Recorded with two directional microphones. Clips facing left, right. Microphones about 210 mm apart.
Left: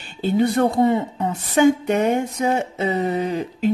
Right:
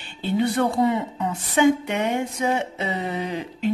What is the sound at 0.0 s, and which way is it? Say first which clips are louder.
A woman's voice: left 4 dB; 40° left (ahead or behind).